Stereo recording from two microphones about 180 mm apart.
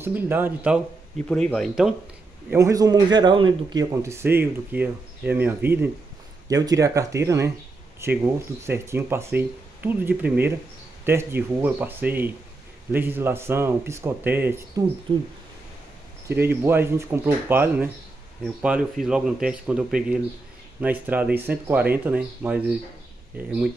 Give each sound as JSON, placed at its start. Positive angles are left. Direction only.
{"t": 0.0, "sound": "speech", "side_deg": -10}
{"t": 1.3, "sound": "a man's voice", "side_deg": 5}
{"t": 2.5, "sound": "a man's voice", "side_deg": -20}
{"t": 3.9, "sound": "speech", "side_deg": -15}
{"t": 16.3, "sound": "a man's voice", "side_deg": -15}